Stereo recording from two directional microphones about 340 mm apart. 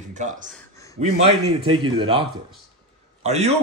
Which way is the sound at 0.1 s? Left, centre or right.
Right.